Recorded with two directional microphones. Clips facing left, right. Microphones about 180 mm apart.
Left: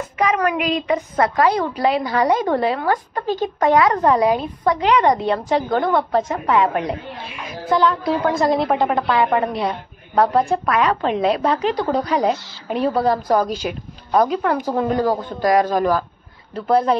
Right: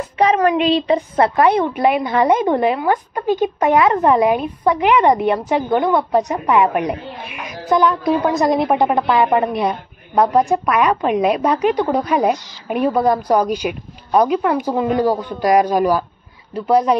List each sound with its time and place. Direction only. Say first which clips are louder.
0.0 s a woman's voice: right 4 dB; 30° right (ahead or behind); by 17.0 s 10° right (ahead or behind)